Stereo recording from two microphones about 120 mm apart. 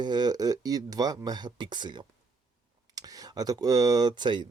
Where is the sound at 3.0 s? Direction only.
30° right (ahead or behind).